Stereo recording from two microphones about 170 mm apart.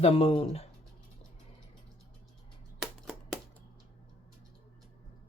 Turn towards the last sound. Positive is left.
turn(degrees=0)  # may be behind; listen again after turning